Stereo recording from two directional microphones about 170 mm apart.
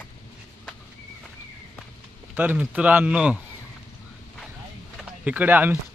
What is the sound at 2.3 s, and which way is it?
Speech, 10° right (ahead or behind).